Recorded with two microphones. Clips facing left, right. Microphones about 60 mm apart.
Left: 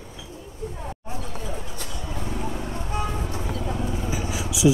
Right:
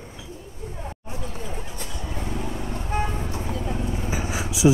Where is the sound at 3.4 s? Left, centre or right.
Right.